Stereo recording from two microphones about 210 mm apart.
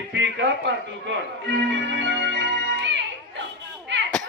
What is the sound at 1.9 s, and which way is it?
Music, 60° right (ahead or behind).